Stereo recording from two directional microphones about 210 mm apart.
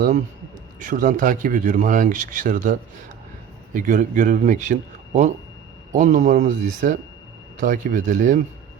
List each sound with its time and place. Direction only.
0.8 s speech: 40° right (ahead or behind)
3.8 s speech: 35° right (ahead or behind)